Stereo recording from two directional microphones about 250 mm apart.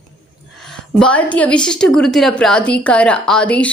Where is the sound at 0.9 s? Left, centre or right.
Centre.